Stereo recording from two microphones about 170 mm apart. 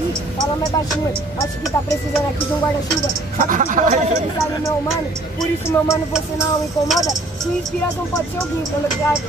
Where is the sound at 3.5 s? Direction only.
50° right (ahead or behind).